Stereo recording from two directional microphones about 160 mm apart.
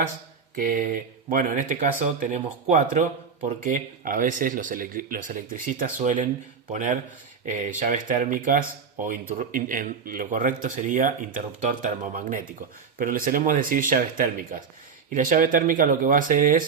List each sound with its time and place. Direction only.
0.5 s speech: 60° right (ahead or behind)